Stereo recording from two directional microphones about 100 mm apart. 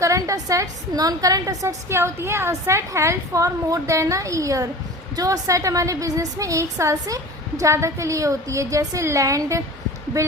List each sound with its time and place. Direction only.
0.0 s a woman's voice: 30° right (ahead or behind)